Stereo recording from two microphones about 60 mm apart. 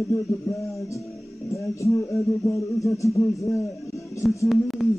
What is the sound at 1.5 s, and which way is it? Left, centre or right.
A man's voice, left.